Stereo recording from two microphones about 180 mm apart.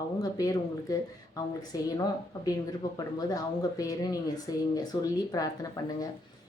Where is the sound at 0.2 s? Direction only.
20° left (ahead or behind).